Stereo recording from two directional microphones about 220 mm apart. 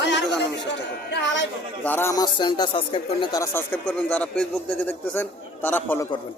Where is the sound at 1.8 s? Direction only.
10° left (ahead or behind).